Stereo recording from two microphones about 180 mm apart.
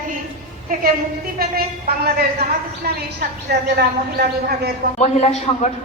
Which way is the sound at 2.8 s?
60° right (ahead or behind).